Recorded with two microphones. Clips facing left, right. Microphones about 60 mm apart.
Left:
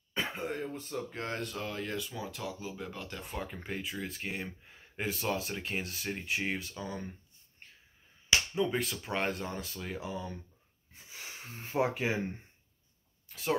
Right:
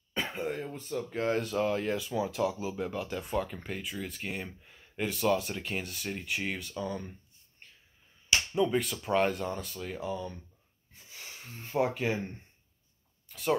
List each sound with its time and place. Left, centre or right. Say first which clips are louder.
0.1 s speech: right 2 dB; centre
3.3 s speech: right 4 dB; centre
4.7 s gasp: right 2 dB; centre
5.2 s speech: right 9 dB; centre
8.5 s speech: right 3 dB; centre
11.1 s speech: left 1 dB; left
13.3 s speech: right 3 dB; centre